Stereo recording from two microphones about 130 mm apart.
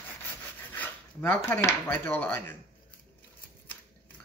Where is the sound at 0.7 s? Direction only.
15° left (ahead or behind).